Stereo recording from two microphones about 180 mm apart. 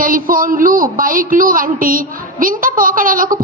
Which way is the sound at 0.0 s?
50° right (ahead or behind).